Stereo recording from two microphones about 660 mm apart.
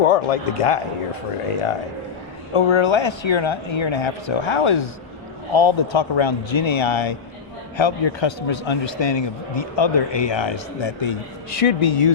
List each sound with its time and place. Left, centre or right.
0.1 s speech: left
2.5 s a man's voice: left